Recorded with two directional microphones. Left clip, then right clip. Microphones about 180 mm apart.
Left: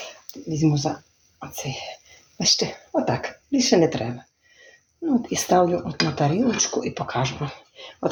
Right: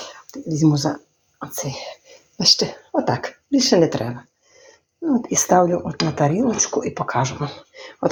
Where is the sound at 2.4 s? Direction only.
30° right (ahead or behind).